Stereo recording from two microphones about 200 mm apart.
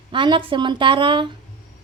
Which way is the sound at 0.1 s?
25° right (ahead or behind).